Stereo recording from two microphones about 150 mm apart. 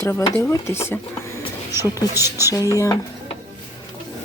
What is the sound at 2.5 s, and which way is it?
Speech, 20° left (ahead or behind).